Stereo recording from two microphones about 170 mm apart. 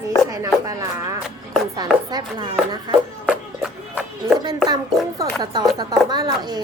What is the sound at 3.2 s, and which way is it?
Music, 5° right (ahead or behind).